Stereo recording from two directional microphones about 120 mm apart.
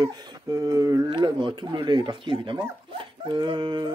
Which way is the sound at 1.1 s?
40° right (ahead or behind).